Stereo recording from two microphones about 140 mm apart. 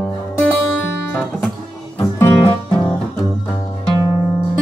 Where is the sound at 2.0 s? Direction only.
20° left (ahead or behind).